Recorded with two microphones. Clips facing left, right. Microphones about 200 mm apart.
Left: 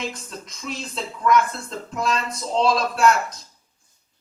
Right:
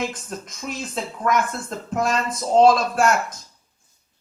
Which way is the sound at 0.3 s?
50° right (ahead or behind).